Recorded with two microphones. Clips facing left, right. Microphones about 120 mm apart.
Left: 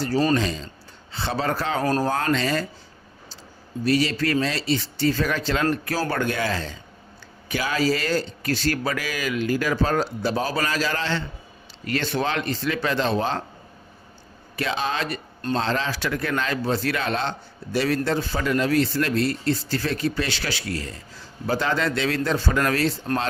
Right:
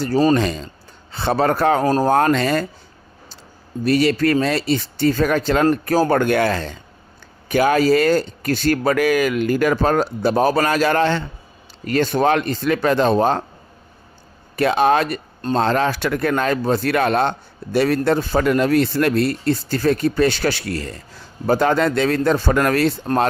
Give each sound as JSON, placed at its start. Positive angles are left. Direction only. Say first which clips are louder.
{"t": 0.3, "sound": "a man's voice", "louder": "right 5 dB", "side_deg": -55}
{"t": 1.8, "sound": "speech", "louder": "right 5 dB", "side_deg": -30}
{"t": 2.0, "sound": "speech", "louder": "right 7 dB", "side_deg": -55}
{"t": 3.8, "sound": "speech", "louder": "right 6 dB", "side_deg": -55}
{"t": 14.6, "sound": "speech", "louder": "right 10 dB", "side_deg": -55}